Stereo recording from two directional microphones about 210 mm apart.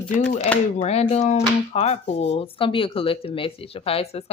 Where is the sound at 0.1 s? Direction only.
40° left (ahead or behind).